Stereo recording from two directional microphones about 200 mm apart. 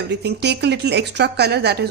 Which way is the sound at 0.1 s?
55° right (ahead or behind).